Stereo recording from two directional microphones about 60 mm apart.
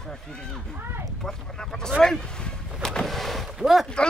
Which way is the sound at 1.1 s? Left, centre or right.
Centre.